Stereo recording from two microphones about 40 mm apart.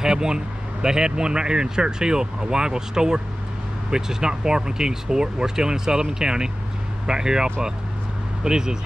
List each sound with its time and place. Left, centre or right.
0.0 s speech: centre
8.5 s speech: centre